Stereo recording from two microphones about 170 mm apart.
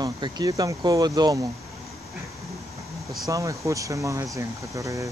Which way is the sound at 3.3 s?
20° right (ahead or behind).